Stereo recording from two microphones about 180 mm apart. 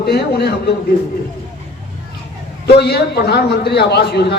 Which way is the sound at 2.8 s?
65° left (ahead or behind).